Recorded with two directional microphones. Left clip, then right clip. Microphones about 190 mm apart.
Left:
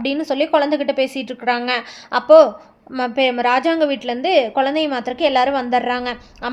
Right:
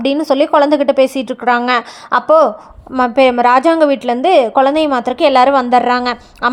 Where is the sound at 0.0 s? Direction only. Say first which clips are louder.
Right 7 dB; 30° right (ahead or behind).